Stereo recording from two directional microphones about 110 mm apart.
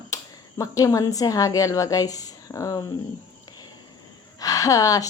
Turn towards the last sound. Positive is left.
turn(degrees=35)  # may be behind; listen again after turning